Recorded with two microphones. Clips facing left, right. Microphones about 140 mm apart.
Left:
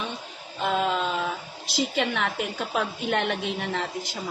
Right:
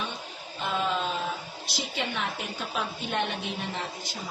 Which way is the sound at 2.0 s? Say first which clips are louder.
Left 3 dB; 75° left (ahead or behind).